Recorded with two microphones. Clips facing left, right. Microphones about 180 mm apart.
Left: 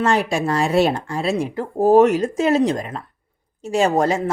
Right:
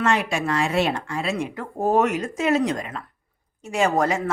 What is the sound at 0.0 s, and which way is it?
Speech, 35° left (ahead or behind).